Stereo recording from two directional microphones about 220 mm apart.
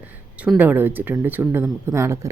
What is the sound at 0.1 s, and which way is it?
Speech, 5° right (ahead or behind).